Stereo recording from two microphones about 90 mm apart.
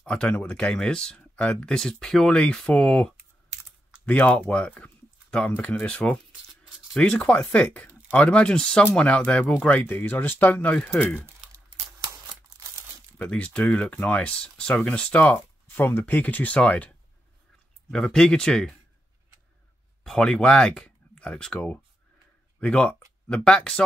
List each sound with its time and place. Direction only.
0.0 s speech: 10° left (ahead or behind)
13.2 s speech: 15° left (ahead or behind)
15.2 s speech: 20° left (ahead or behind)
17.9 s speech: 5° left (ahead or behind)
20.0 s speech: 5° left (ahead or behind)